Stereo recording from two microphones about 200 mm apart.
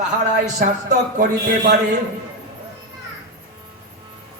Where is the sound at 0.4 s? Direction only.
40° right (ahead or behind).